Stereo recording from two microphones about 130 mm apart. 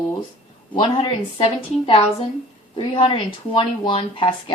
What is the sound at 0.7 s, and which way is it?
Speech, 40° left (ahead or behind).